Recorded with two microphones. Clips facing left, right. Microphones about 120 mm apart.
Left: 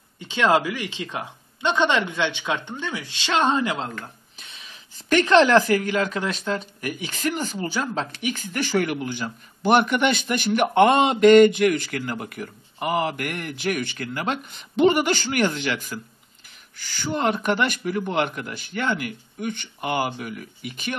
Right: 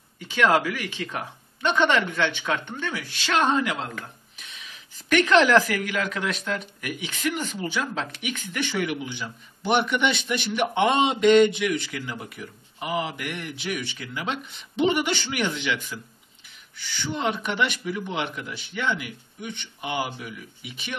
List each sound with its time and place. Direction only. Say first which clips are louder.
0.3 s a woman's voice: left 1 dB; 25° left (ahead or behind); by 16.0 s 45° left (ahead or behind)
17.0 s a man's voice: left 4 dB; 50° left (ahead or behind)